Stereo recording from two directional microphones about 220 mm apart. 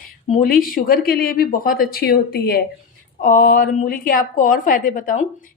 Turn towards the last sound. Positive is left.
turn(degrees=35)  # may be behind; listen again after turning